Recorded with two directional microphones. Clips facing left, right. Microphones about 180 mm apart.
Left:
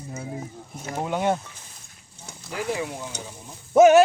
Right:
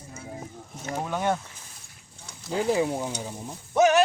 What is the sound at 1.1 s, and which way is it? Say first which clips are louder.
Speech: left 3 dB; 15° left (ahead or behind).